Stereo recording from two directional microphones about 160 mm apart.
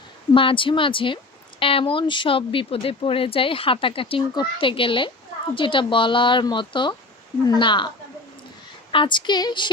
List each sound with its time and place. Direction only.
0.3 s speech: 30° left (ahead or behind)
8.9 s speech: 30° left (ahead or behind)